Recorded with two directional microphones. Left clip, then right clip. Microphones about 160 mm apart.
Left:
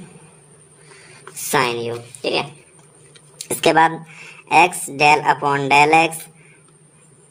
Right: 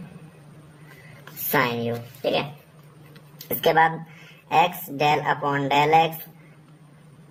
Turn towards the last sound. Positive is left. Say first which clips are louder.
# left 5 dB
turn(degrees=45)  # may be behind; listen again after turning